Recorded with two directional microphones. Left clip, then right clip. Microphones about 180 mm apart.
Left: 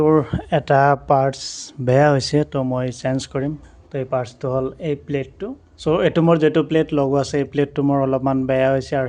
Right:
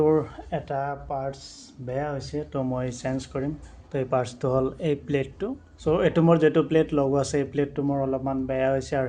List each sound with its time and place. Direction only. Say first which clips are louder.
0.0 s speech: left 6 dB; 40° left (ahead or behind); by 2.5 s 65° left (ahead or behind)
2.5 s speech: left 6 dB; 35° left (ahead or behind)
3.9 s speech: left 3 dB; 15° left (ahead or behind)
5.8 s speech: left 5 dB; 25° left (ahead or behind)
7.8 s speech: left 8 dB; 50° left (ahead or behind); by 9.0 s 30° left (ahead or behind)